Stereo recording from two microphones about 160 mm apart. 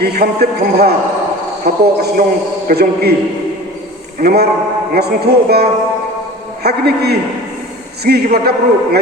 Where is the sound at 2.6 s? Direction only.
80° right.